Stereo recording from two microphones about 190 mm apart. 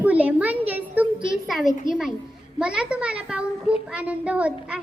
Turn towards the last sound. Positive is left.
turn(degrees=-5)  # may be behind; listen again after turning